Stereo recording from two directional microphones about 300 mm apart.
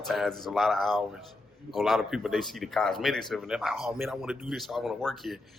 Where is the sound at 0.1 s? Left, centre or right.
Centre.